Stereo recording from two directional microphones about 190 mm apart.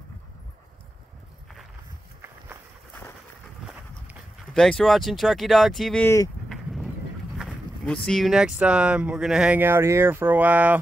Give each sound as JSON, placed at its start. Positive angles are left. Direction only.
{"t": 2.2, "sound": "walk", "side_deg": -10}
{"t": 3.6, "sound": "a sound", "side_deg": -5}
{"t": 4.6, "sound": "speech", "side_deg": 0}
{"t": 6.0, "sound": "speech", "side_deg": 15}
{"t": 6.5, "sound": "horse", "side_deg": 0}
{"t": 7.3, "sound": "speech", "side_deg": 0}